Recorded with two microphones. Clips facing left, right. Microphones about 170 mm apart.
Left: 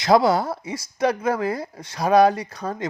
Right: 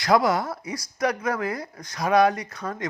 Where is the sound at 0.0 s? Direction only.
30° left (ahead or behind).